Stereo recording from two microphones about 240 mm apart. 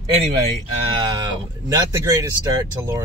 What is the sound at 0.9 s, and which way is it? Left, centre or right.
Speech, centre.